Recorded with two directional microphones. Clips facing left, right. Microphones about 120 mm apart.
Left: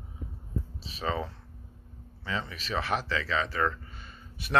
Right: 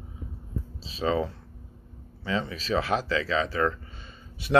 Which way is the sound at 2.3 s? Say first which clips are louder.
Right 6 dB; 30° right (ahead or behind).